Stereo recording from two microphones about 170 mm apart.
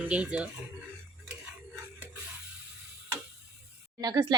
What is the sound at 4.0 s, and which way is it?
Speech, 25° right (ahead or behind).